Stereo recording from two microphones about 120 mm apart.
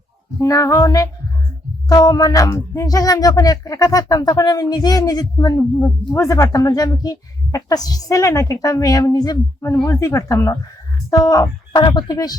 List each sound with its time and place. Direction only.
0.3 s speech: 25° left (ahead or behind)